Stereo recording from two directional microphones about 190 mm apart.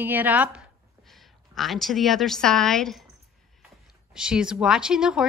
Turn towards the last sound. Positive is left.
turn(degrees=-5)  # may be behind; listen again after turning